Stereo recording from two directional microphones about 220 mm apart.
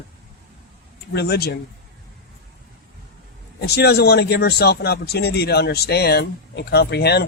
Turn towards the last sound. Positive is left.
turn(degrees=50)  # may be behind; listen again after turning